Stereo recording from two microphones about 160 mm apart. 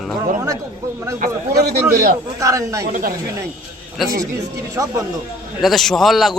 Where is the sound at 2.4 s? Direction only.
20° right (ahead or behind).